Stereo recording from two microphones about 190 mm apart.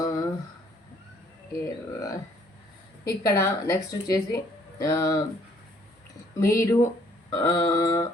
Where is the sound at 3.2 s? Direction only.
15° left (ahead or behind).